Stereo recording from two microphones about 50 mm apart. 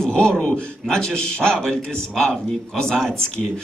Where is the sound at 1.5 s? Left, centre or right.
Centre.